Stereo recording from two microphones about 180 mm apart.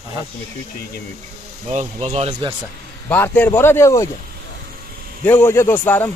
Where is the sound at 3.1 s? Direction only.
10° left (ahead or behind).